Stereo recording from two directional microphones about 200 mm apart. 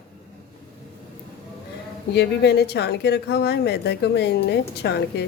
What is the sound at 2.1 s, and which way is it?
Speech, 55° left (ahead or behind).